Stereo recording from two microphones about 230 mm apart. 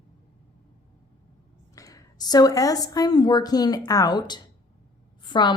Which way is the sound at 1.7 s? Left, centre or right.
Centre.